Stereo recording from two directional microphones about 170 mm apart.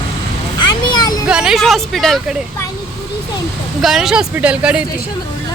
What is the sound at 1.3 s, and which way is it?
Speech, 5° right (ahead or behind).